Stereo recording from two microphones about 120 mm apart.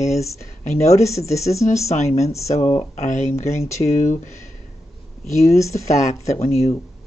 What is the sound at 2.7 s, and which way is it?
Speech, 75° left (ahead or behind).